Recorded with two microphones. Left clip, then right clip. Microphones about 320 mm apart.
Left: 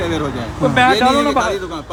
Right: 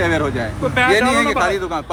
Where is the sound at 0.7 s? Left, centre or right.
Left.